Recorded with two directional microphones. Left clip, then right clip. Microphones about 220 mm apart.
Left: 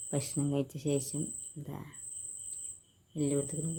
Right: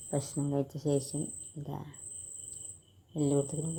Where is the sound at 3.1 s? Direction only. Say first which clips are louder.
Right 3 dB; centre (ahead or behind).